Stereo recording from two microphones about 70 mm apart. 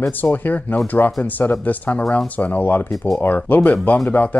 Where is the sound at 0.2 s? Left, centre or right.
Left.